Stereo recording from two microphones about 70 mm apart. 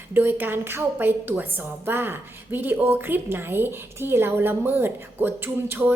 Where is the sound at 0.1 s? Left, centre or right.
Right.